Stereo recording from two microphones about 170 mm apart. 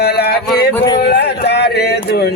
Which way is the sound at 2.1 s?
70° left (ahead or behind).